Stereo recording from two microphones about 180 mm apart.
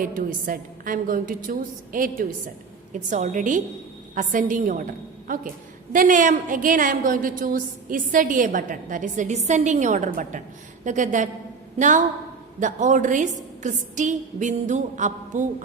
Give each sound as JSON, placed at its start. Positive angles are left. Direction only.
{"t": 0.0, "sound": "a woman's voice", "side_deg": -50}